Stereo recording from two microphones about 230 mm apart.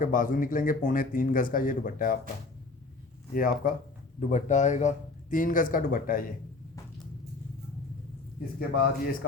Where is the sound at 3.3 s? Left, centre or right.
Left.